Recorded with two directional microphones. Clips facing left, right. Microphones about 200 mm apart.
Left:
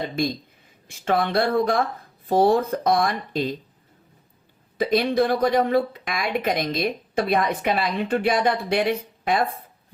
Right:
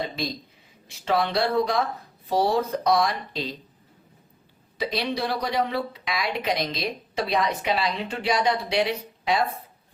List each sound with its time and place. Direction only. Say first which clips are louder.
0.9 s a woman's voice: left 2 dB; 50° left (ahead or behind)
4.8 s a woman's voice: left 7 dB; 50° left (ahead or behind)